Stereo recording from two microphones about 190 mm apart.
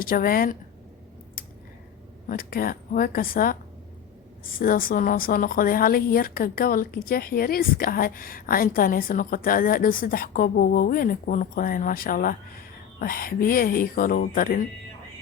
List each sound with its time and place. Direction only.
0.0 s speech: 50° left (ahead or behind)
2.2 s speech: 50° left (ahead or behind)